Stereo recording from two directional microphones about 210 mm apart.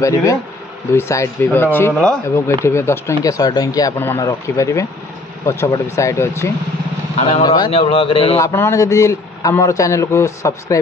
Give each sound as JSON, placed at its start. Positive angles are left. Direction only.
{"t": 0.0, "sound": "speech", "side_deg": 15}
{"t": 7.2, "sound": "speech", "side_deg": 30}
{"t": 7.4, "sound": "speech", "side_deg": 20}
{"t": 8.4, "sound": "speech", "side_deg": 15}